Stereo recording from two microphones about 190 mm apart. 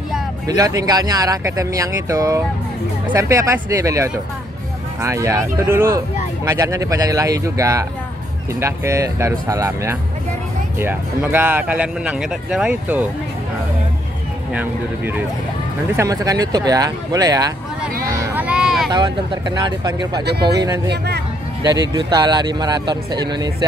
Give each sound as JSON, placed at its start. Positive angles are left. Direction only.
{"t": 0.5, "sound": "speech", "side_deg": -20}
{"t": 14.5, "sound": "speech", "side_deg": -10}
{"t": 18.1, "sound": "vehicle", "side_deg": -10}
{"t": 18.9, "sound": "speech", "side_deg": -25}
{"t": 20.2, "sound": "speech", "side_deg": -60}
{"t": 20.6, "sound": "speech", "side_deg": -20}